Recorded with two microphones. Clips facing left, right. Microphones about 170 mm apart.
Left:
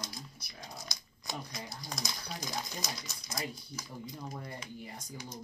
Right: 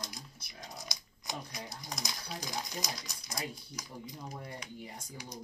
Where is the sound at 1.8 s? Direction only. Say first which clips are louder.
Left 1 dB; 20° right (ahead or behind).